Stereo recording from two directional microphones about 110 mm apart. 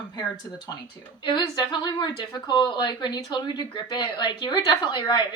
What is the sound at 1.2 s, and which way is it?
A woman's voice, 45° left (ahead or behind).